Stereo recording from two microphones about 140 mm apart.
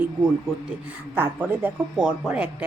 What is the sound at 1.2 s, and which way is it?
Speech, 10° right (ahead or behind).